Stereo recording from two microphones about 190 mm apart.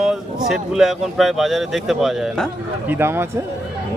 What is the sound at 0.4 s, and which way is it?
Speech, centre (ahead or behind).